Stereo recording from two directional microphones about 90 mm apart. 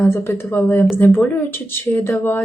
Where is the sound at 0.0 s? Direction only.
25° left (ahead or behind).